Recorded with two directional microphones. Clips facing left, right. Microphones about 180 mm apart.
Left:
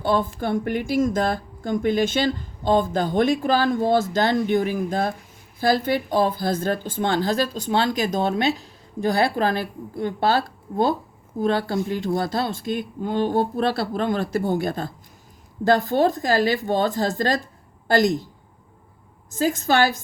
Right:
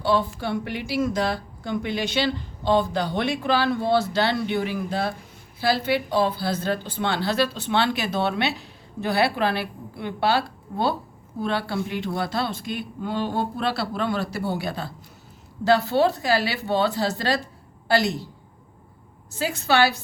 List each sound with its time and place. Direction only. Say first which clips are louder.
0.0 s a woman's voice: left 1 dB; 50° left (ahead or behind)
19.4 s speech: left 2 dB; 45° left (ahead or behind)